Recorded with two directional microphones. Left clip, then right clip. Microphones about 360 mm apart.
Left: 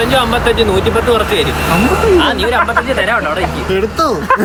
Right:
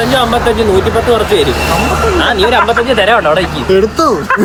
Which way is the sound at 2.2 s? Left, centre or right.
Centre.